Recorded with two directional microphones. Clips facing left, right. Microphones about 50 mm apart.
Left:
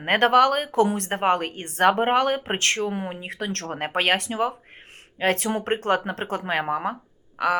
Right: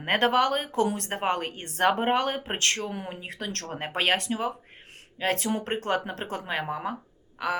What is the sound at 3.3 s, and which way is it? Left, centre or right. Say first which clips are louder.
Speech: left 5 dB; left.